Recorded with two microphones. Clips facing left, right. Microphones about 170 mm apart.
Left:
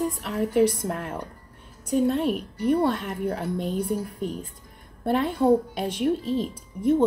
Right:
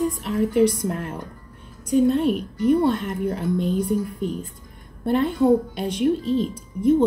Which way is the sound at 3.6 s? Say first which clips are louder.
Right 4 dB; 45° left (ahead or behind).